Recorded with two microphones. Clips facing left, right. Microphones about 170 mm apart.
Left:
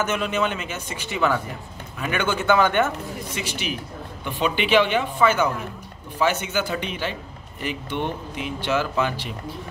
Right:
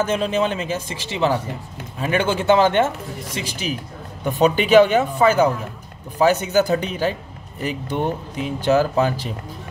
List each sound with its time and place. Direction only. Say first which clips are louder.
0.0 s speech: right 4 dB; 30° right (ahead or behind)
4.2 s speech: right 7 dB; 40° right (ahead or behind)